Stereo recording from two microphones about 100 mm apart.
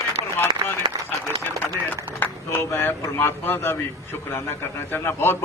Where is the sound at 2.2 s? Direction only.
20° left (ahead or behind).